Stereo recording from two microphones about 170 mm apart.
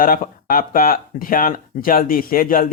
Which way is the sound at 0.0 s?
60° left (ahead or behind).